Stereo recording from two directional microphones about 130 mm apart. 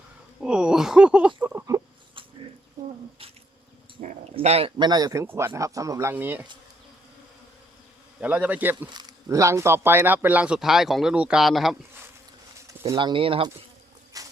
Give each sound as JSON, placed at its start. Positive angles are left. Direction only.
{"t": 0.3, "sound": "speech", "side_deg": -5}
{"t": 2.8, "sound": "a sound", "side_deg": -25}
{"t": 4.0, "sound": "a sound", "side_deg": -45}
{"t": 4.4, "sound": "a man's voice", "side_deg": -50}
{"t": 4.8, "sound": "speech", "side_deg": -30}
{"t": 8.2, "sound": "speech", "side_deg": -10}
{"t": 8.9, "sound": "speech", "side_deg": -30}
{"t": 13.0, "sound": "speech", "side_deg": -40}
{"t": 14.1, "sound": "a sound", "side_deg": -25}